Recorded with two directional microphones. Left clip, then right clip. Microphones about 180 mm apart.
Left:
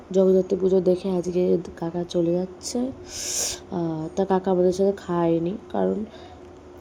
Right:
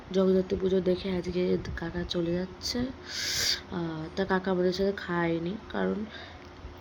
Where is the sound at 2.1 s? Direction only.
Centre (ahead or behind).